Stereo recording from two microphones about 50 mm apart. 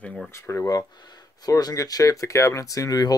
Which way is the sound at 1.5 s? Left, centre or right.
Left.